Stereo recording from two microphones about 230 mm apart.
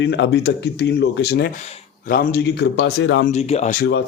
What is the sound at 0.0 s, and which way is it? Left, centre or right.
A man's voice, left.